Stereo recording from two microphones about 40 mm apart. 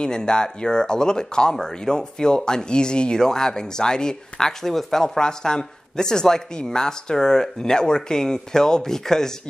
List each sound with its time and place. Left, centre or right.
0.0 s speech: left